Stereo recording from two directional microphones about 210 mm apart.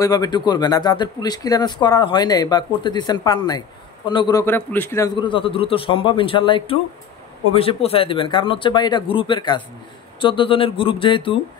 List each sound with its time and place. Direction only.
0.0 s speech: 20° left (ahead or behind)